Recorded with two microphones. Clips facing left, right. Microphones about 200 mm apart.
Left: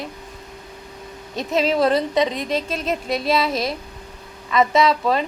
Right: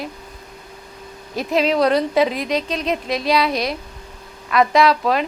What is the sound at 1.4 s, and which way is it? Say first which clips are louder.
A woman's voice: right 1 dB; centre (ahead or behind).